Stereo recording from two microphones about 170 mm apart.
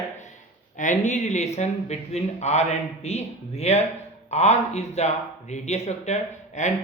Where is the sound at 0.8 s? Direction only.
45° left (ahead or behind).